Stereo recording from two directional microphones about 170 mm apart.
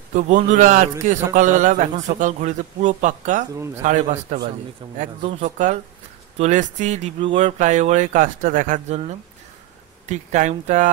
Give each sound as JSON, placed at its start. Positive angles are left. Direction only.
{"t": 0.1, "sound": "a man's voice", "side_deg": -45}
{"t": 3.5, "sound": "a man's voice", "side_deg": -15}
{"t": 3.8, "sound": "a man's voice", "side_deg": -45}